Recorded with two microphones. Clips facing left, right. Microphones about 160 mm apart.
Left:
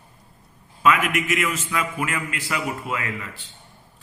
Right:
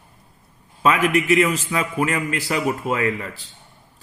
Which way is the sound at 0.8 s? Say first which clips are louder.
Right 3 dB; 30° right (ahead or behind).